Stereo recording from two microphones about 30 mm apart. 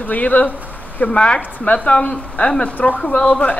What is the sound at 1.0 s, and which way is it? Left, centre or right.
Speech, left.